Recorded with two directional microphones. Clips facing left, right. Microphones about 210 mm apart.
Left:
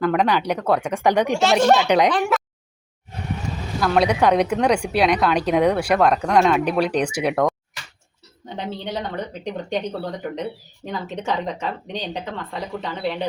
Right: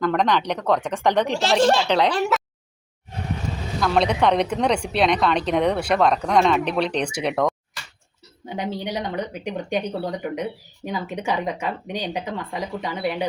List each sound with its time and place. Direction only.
0.0 s a woman's voice: 10° left (ahead or behind)
1.5 s speech: 30° right (ahead or behind)
3.8 s a woman's voice: 5° left (ahead or behind)
8.4 s speech: 10° right (ahead or behind)